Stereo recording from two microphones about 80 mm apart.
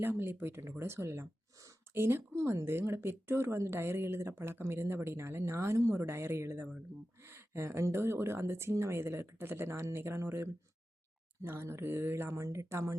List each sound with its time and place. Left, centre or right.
0.0 s speech: right